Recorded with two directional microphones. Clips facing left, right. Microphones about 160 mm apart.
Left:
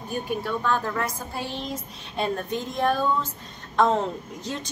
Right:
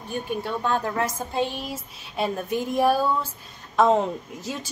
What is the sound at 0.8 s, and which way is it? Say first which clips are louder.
Speech: right 2 dB; 20° right (ahead or behind).